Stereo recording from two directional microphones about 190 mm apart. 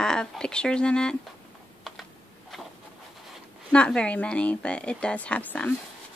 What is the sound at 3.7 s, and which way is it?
A woman's voice, 5° left (ahead or behind).